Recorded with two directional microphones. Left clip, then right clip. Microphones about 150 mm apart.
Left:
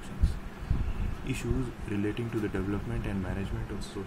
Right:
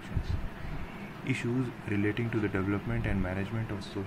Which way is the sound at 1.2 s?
Centre (ahead or behind).